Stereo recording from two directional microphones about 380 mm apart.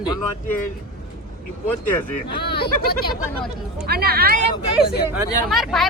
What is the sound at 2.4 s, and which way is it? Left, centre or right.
Speech, left.